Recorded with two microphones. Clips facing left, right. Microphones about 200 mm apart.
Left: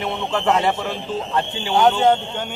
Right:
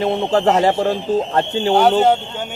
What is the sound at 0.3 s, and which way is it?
Speech, 40° right (ahead or behind).